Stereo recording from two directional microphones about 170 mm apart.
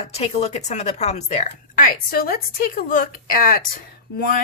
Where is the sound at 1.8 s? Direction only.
60° left (ahead or behind).